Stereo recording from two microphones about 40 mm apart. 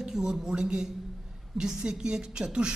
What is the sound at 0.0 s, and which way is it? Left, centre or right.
A woman's voice, centre.